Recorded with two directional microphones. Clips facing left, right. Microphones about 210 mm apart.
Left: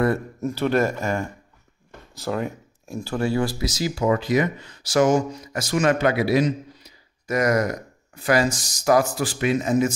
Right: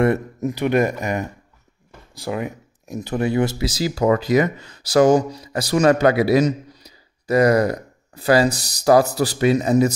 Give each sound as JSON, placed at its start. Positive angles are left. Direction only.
{"t": 0.0, "sound": "speech", "side_deg": -20}